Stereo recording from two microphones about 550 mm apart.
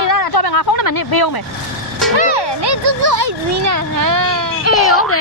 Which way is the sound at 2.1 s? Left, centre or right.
Right.